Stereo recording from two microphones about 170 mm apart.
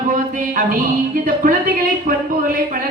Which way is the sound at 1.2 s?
55° right (ahead or behind).